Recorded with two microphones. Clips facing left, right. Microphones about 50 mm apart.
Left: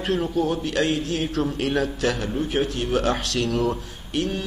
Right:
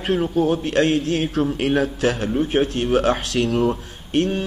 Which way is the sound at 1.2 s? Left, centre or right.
Centre.